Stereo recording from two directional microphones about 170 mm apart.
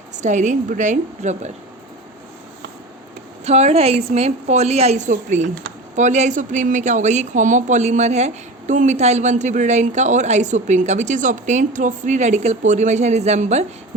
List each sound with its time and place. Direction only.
0.2 s speech: 45° right (ahead or behind)
3.4 s a woman's voice: 40° right (ahead or behind)